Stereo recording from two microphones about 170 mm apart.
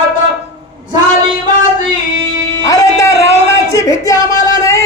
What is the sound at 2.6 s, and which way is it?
Music, 20° left (ahead or behind).